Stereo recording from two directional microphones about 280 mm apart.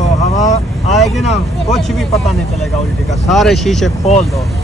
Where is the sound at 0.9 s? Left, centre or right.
Centre.